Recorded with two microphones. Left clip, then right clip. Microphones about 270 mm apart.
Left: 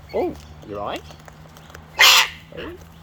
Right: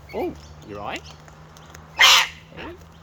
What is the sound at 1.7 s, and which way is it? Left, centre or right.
Bird, left.